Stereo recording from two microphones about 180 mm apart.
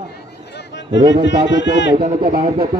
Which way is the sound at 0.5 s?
80° left.